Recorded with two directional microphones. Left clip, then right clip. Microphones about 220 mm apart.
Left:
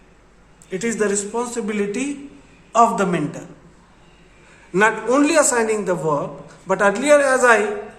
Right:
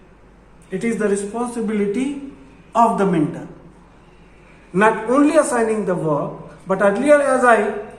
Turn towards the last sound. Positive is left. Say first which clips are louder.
# even
turn(degrees=40)  # may be behind; listen again after turning